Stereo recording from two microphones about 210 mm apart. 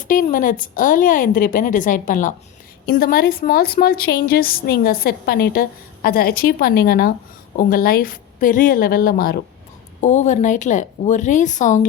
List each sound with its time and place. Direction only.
0.1 s a woman's voice: 40° left (ahead or behind)